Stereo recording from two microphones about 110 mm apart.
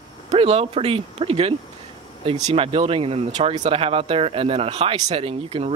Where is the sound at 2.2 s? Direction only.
75° right (ahead or behind).